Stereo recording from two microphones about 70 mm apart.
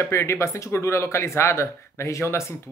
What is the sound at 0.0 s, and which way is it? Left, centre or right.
Speech, left.